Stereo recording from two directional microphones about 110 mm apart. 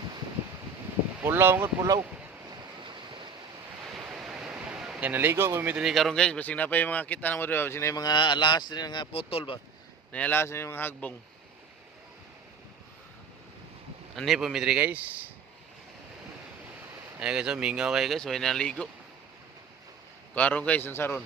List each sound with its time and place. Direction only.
1.2 s speech: 20° right (ahead or behind)
3.9 s a sound: 5° right (ahead or behind); by 5.7 s 25° right (ahead or behind)
5.7 s speech: centre (ahead or behind); by 8.0 s 25° left (ahead or behind)
8.0 s speech: 45° left (ahead or behind)
10.1 s speech: 15° left (ahead or behind)
14.2 s speech: centre (ahead or behind)
14.8 s speech: 15° right (ahead or behind)
17.2 s speech: 10° right (ahead or behind); by 18.9 s 10° left (ahead or behind)
20.3 s speech: 15° left (ahead or behind)